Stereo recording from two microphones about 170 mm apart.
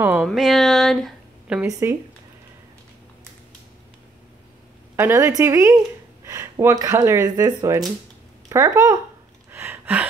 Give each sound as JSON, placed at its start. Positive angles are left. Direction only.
{"t": 0.0, "sound": "a sound", "side_deg": -10}
{"t": 0.3, "sound": "speech", "side_deg": 0}
{"t": 1.6, "sound": "speech", "side_deg": -15}
{"t": 4.9, "sound": "a woman's voice", "side_deg": -15}
{"t": 9.5, "sound": "gasp", "side_deg": -15}